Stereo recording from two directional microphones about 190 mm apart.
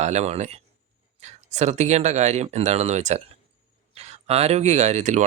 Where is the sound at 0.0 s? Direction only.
35° right (ahead or behind).